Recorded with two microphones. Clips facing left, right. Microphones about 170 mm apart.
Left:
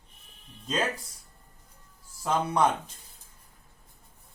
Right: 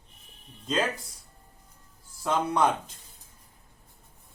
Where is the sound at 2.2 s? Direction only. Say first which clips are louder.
Even; centre (ahead or behind).